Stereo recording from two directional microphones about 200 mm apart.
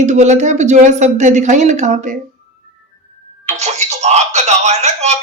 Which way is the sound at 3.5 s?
35° right (ahead or behind).